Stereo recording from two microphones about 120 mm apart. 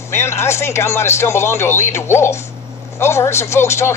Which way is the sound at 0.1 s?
20° left (ahead or behind).